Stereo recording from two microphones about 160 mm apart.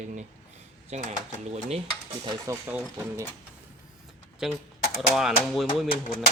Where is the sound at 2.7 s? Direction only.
10° right (ahead or behind).